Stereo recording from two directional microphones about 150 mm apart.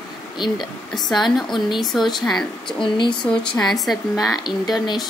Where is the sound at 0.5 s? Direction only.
Centre (ahead or behind).